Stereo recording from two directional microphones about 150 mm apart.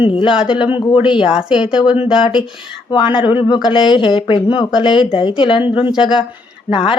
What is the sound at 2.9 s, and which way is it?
Speech, 35° left (ahead or behind).